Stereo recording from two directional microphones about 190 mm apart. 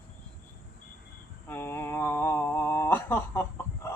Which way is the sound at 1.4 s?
10° left (ahead or behind).